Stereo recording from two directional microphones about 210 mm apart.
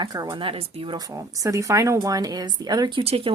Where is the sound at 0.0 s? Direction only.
20° right (ahead or behind).